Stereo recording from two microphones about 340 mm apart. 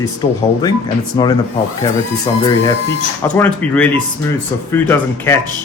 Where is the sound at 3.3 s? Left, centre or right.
Centre.